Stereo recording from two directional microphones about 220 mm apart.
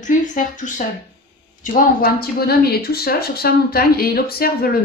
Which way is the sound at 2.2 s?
45° left (ahead or behind).